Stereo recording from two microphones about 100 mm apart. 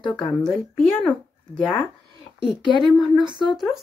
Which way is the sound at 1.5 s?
20° left (ahead or behind).